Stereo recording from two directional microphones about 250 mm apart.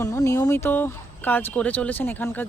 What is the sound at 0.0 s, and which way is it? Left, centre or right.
Speech, centre.